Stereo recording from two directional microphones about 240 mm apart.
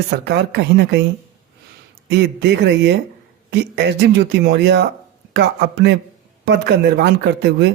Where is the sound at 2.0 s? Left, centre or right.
Right.